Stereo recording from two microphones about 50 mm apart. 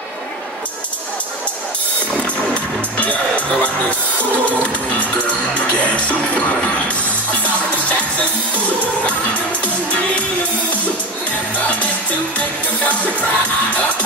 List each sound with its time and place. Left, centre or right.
2.2 s music: left
7.4 s music: left
11.5 s music: left